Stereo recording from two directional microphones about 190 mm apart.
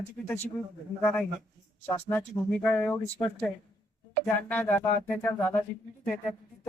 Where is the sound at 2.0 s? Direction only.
5° left (ahead or behind).